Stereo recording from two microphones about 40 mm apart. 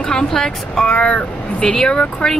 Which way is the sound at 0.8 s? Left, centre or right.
Left.